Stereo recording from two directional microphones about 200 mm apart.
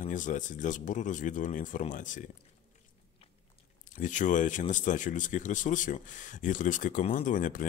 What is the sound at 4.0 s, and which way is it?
Speech, 40° left (ahead or behind).